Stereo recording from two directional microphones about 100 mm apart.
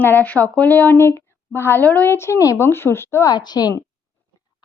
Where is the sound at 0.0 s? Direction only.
20° left (ahead or behind).